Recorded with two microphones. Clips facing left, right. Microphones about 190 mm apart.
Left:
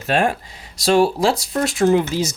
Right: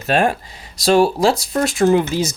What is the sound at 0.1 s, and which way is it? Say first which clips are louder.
Speech: right 2 dB; 40° right (ahead or behind).